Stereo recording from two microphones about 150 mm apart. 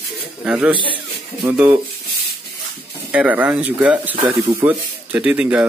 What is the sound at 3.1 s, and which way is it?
Speech, 10° right (ahead or behind).